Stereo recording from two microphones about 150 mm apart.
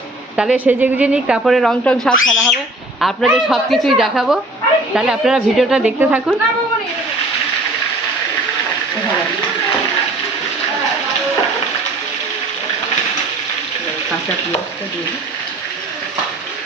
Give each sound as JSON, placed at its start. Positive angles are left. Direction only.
{"t": 0.3, "sound": "a woman's voice", "side_deg": -10}